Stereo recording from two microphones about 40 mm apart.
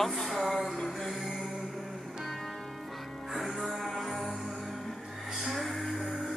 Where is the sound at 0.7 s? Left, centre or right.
Centre.